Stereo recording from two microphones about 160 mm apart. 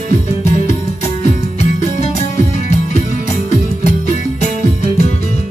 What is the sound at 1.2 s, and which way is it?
Music, 45° left (ahead or behind).